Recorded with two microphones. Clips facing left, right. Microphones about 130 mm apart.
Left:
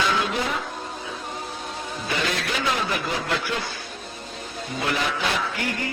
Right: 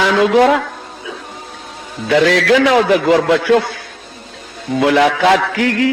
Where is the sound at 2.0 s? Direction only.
90° right.